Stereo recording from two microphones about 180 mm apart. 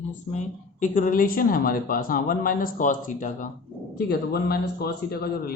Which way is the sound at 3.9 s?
60° left (ahead or behind).